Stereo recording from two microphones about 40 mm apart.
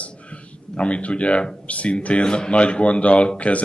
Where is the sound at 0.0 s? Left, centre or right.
Left.